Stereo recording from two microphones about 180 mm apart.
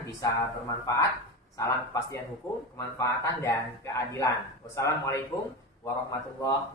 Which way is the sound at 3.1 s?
15° left (ahead or behind).